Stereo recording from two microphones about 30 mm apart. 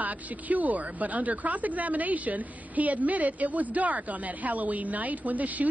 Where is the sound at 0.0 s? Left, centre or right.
Right.